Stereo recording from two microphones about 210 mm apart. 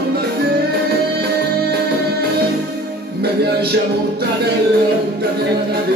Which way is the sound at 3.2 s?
50° right (ahead or behind).